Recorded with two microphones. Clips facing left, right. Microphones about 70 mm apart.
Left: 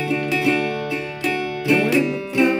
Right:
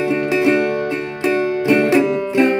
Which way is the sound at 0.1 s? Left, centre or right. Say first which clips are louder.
Right 3 dB; right.